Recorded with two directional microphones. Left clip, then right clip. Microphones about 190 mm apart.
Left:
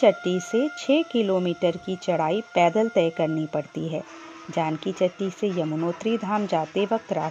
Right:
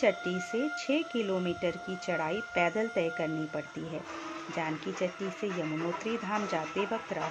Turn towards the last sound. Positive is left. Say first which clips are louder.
# left 8 dB
turn(degrees=45)  # may be behind; listen again after turning